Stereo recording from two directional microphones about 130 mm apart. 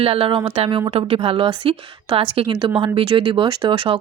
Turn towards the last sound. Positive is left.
turn(degrees=-40)  # may be behind; listen again after turning